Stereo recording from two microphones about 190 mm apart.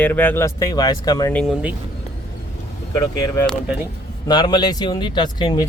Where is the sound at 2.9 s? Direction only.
15° left (ahead or behind).